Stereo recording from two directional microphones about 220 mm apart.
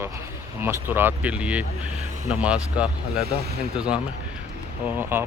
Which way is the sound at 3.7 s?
5° right (ahead or behind).